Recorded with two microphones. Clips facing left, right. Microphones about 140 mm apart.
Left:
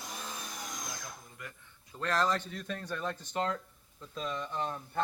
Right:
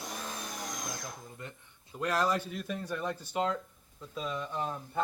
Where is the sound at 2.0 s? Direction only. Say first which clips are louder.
Right 1 dB; 10° right (ahead or behind).